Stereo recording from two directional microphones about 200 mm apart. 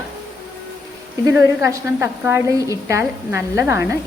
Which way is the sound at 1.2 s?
15° right (ahead or behind).